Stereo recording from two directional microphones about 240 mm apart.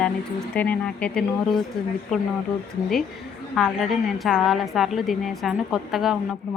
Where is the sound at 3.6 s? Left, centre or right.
Centre.